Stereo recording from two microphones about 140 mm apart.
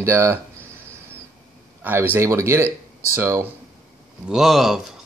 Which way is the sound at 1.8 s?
15° right (ahead or behind).